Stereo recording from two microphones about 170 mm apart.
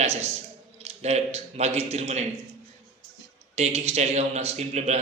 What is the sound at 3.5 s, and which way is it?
A man's voice, 40° right (ahead or behind).